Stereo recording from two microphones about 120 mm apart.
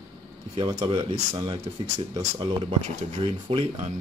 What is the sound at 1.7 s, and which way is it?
Speech, 35° right (ahead or behind).